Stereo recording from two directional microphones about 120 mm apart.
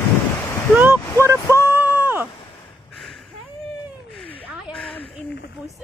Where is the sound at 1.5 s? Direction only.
20° right (ahead or behind).